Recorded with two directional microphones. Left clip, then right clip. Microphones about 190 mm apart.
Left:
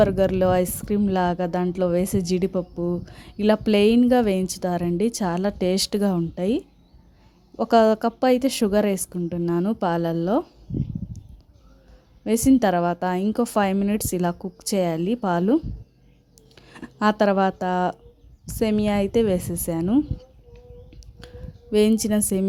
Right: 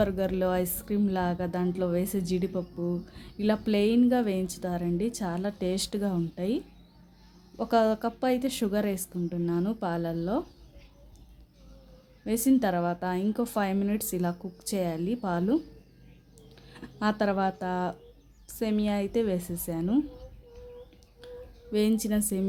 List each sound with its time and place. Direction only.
0.0 s a woman's voice: 40° left (ahead or behind)
12.2 s a woman's voice: 40° left (ahead or behind)
21.7 s a woman's voice: 40° left (ahead or behind)